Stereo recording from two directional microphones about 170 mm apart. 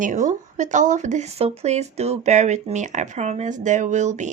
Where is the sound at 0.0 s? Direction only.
45° right (ahead or behind).